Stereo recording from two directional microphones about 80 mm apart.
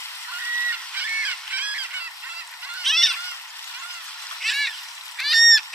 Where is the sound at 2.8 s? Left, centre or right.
Centre.